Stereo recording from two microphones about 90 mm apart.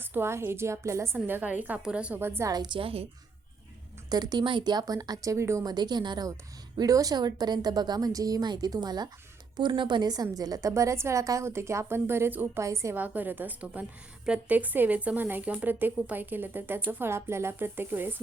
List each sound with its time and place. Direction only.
0.0 s a woman's voice: 25° right (ahead or behind)
2.1 s a woman's voice: 25° right (ahead or behind)
2.5 s a woman's voice: 50° right (ahead or behind)
2.7 s a woman's voice: 90° right
4.1 s a woman's voice: 50° right (ahead or behind); by 5.6 s 35° right (ahead or behind)
5.6 s a woman's voice: 50° right (ahead or behind)
6.7 s a woman's voice: 40° right (ahead or behind)
13.0 s a woman's voice: 20° right (ahead or behind)